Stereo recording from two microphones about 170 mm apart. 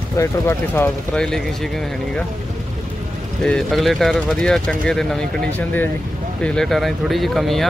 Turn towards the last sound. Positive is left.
turn(degrees=0)  # may be behind; listen again after turning